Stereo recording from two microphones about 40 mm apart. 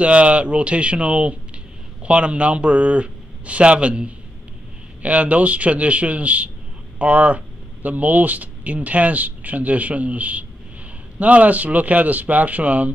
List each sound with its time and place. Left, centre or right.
0.0 s speech: right